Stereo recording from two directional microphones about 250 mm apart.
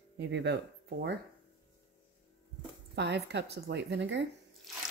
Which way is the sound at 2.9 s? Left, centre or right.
Right.